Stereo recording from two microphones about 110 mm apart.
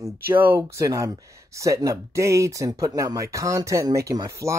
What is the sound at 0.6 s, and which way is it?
Speech, 30° right (ahead or behind).